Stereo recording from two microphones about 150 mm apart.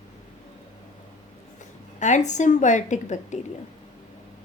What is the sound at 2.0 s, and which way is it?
A woman's voice, 55° left (ahead or behind).